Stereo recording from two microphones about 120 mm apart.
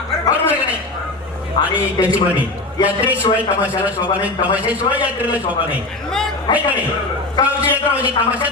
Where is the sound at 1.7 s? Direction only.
10° right (ahead or behind).